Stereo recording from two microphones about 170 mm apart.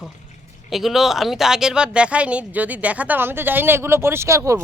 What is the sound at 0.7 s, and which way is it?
A woman's voice, centre (ahead or behind).